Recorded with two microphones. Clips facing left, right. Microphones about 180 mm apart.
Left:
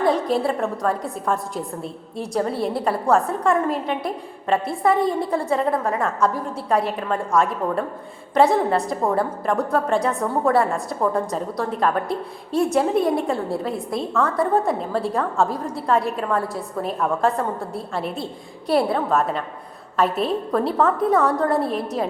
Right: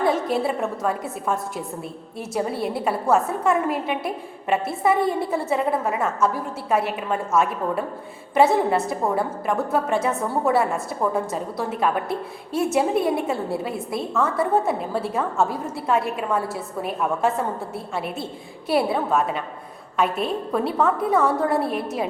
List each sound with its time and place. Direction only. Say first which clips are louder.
0.3 s a woman's voice: left 2 dB; 5° right (ahead or behind)